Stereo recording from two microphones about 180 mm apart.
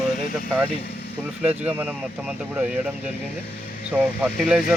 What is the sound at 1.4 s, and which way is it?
Speech, 10° right (ahead or behind).